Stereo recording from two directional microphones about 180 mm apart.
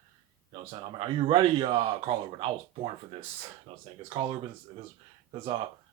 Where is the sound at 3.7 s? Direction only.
30° right (ahead or behind).